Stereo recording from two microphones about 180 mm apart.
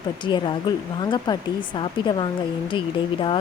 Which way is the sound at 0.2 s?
25° left (ahead or behind).